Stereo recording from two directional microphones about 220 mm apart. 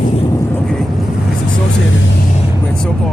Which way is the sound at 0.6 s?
Centre (ahead or behind).